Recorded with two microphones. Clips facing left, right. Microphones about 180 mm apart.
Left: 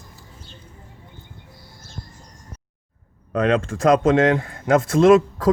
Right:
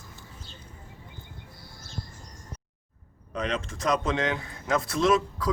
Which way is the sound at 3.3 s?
55° left (ahead or behind).